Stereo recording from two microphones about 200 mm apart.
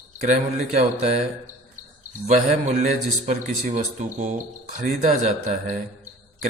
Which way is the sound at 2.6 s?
35° right (ahead or behind).